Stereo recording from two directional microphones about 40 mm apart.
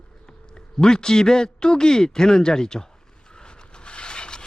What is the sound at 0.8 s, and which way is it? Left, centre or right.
A man's voice, centre.